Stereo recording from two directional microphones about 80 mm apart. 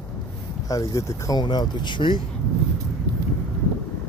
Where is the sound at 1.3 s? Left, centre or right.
Left.